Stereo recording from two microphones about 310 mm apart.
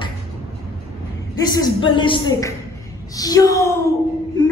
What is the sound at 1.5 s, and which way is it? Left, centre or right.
A man's voice, centre.